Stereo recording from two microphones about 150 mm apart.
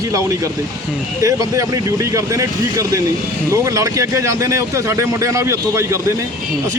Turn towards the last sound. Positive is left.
turn(degrees=-20)  # may be behind; listen again after turning